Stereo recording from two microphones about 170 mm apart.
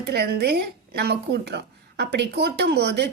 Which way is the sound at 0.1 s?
75° right (ahead or behind).